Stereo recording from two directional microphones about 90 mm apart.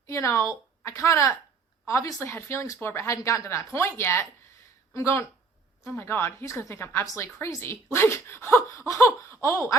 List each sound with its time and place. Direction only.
0.1 s a woman's voice: 35° left (ahead or behind)